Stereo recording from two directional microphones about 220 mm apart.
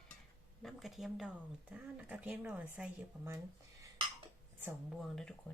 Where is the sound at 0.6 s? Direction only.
Centre (ahead or behind).